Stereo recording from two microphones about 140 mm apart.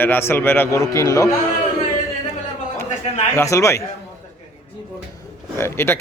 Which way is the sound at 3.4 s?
20° left (ahead or behind).